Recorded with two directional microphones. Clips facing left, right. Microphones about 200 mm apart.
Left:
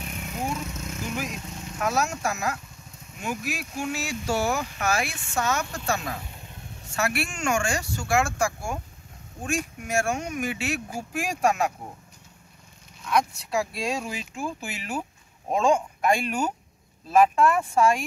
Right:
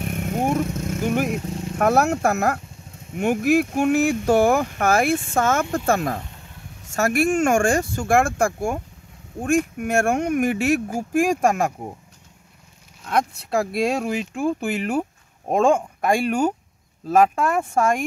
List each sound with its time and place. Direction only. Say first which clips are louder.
0.0 s vehicle: right 9 dB; 55° right (ahead or behind)
1.8 s speech: right 8 dB; 55° right (ahead or behind)
13.0 s speech: right 2 dB; 55° right (ahead or behind)